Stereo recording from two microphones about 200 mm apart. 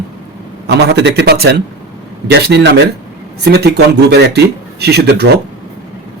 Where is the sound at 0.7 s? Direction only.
55° right (ahead or behind).